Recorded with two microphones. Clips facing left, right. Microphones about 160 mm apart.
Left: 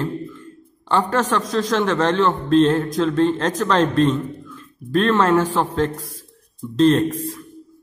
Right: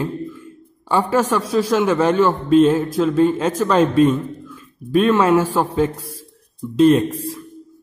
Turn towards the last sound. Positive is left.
turn(degrees=-10)  # may be behind; listen again after turning